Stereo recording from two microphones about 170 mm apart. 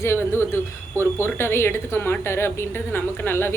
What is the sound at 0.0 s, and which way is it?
Speech, 15° left (ahead or behind).